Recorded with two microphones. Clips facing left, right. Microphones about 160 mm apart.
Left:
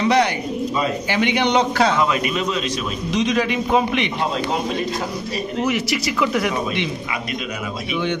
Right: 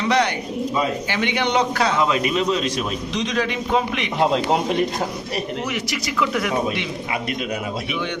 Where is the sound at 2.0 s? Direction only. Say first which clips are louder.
Even; 25° right (ahead or behind).